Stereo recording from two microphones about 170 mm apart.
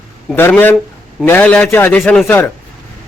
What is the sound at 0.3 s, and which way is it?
A man's voice, 10° left (ahead or behind).